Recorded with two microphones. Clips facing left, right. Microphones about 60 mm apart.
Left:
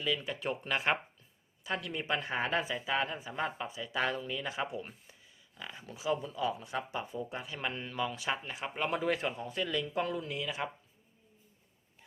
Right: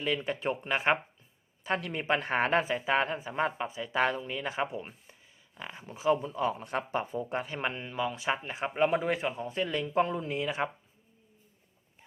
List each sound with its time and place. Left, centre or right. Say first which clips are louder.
0.0 s speech: right 4 dB; right
1.6 s speech: right 5 dB; right
7.8 s speech: right 3 dB; centre
9.3 s speech: right 3 dB; right